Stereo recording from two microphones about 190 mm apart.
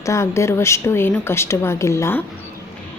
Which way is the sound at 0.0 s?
15° left (ahead or behind).